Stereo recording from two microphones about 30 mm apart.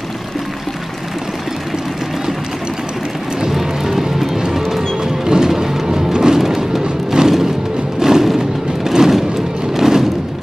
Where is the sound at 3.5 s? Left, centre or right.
Centre.